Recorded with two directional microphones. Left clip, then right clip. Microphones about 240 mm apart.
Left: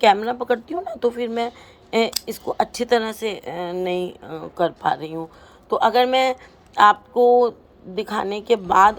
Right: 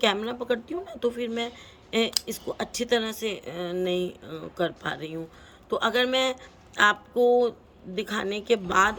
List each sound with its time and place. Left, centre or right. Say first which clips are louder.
0.0 s speech: left 9 dB; centre